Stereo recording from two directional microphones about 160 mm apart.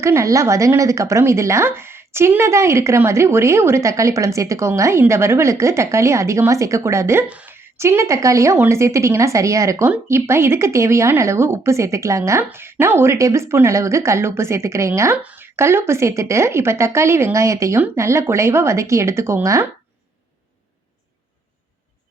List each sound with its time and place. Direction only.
0.0 s speech: 15° right (ahead or behind)